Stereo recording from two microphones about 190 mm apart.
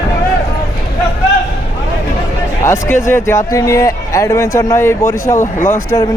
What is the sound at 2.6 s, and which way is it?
Speech, 15° left (ahead or behind).